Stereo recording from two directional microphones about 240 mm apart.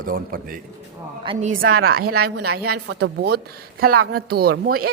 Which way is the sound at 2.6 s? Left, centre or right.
Right.